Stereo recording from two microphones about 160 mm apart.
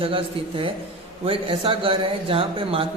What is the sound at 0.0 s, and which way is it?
A man's voice, 35° right (ahead or behind).